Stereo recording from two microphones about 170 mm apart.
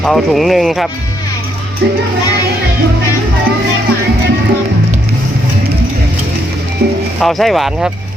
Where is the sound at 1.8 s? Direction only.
75° right (ahead or behind).